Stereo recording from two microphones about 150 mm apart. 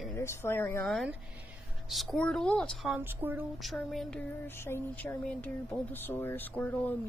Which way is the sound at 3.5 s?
Centre (ahead or behind).